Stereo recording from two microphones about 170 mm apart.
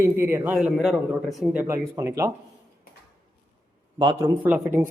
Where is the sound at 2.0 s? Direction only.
20° right (ahead or behind).